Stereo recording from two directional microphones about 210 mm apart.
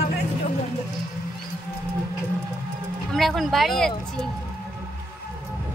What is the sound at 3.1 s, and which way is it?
Speech, centre (ahead or behind).